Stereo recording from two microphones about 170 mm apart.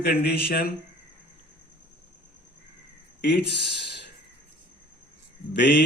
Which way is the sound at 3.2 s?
85° left.